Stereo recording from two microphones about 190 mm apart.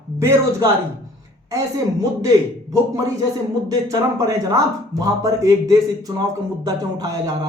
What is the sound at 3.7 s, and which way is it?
Speech, 15° right (ahead or behind).